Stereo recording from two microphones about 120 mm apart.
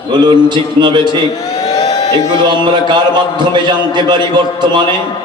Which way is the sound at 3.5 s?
40° right (ahead or behind).